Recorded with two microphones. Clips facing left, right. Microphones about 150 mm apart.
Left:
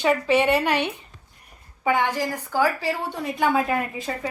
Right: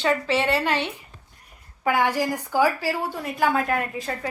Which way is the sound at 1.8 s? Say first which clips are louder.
Right 1 dB; 10° right (ahead or behind).